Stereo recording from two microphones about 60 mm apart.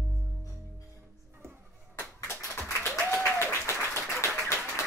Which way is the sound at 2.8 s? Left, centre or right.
Left.